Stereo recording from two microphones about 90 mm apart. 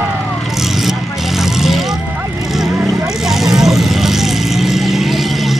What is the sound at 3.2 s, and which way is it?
Vehicle, 5° right (ahead or behind).